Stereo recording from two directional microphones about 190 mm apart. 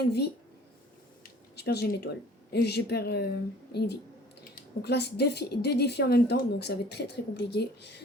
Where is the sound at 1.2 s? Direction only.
60° left (ahead or behind).